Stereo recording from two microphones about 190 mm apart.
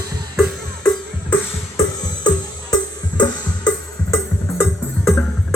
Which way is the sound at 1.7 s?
20° left (ahead or behind).